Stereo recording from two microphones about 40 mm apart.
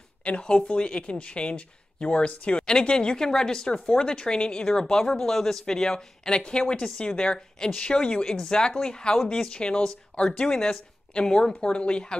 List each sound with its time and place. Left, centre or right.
0.2 s speech: left